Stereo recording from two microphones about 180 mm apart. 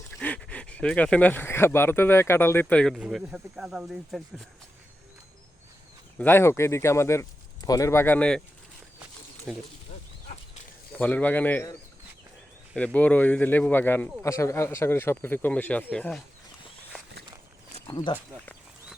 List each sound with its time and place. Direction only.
0.2 s speech: 5° left (ahead or behind)
6.1 s speech: 10° left (ahead or behind)
9.5 s speech: centre (ahead or behind)
10.9 s speech: 10° left (ahead or behind)
17.9 s speech: 25° left (ahead or behind)